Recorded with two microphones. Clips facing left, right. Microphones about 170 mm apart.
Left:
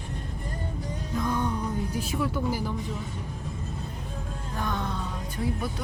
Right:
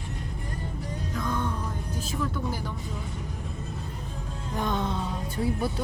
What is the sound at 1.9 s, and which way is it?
Speech, 15° left (ahead or behind).